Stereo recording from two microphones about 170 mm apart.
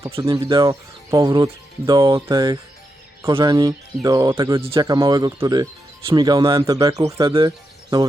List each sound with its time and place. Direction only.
0.3 s speech: 25° right (ahead or behind)